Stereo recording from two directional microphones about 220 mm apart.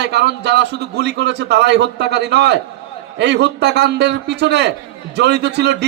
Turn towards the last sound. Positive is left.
turn(degrees=-50)  # may be behind; listen again after turning